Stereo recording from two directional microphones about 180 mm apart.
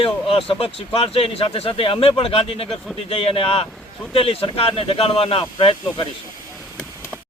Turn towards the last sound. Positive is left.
turn(degrees=30)  # may be behind; listen again after turning